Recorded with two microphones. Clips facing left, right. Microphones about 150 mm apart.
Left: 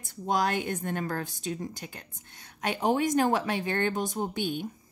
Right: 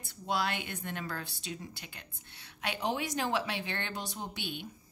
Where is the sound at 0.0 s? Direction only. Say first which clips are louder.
Left 5 dB; 45° left (ahead or behind).